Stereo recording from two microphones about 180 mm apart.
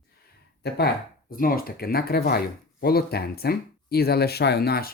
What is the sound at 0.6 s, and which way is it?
Speech, 65° left (ahead or behind).